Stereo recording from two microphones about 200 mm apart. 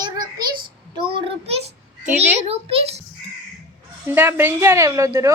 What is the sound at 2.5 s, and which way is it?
Speech, 30° right (ahead or behind).